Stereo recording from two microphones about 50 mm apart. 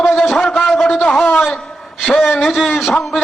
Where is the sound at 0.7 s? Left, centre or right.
Centre.